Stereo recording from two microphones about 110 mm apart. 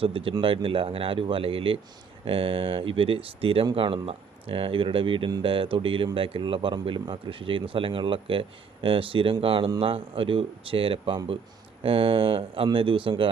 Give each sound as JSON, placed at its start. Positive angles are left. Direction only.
{"t": 0.0, "sound": "speech", "side_deg": -55}